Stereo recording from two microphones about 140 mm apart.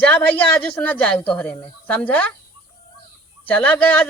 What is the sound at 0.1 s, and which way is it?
Speech, 10° left (ahead or behind).